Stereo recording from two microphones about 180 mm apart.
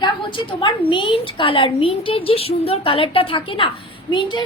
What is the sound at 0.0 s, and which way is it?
A woman's voice, 25° left (ahead or behind).